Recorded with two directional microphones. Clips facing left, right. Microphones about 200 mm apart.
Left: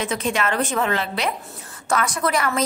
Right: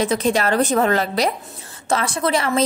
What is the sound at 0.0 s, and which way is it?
A woman's voice, 35° right (ahead or behind).